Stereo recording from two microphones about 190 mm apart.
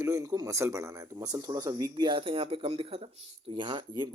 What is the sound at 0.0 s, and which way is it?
A man's voice, 15° right (ahead or behind).